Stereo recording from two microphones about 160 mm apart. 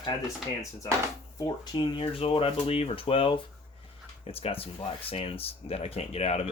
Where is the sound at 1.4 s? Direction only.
30° left (ahead or behind).